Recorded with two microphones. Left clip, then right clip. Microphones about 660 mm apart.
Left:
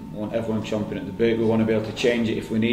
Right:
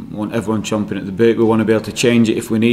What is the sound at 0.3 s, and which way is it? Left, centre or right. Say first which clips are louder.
Speech: right 6 dB; right.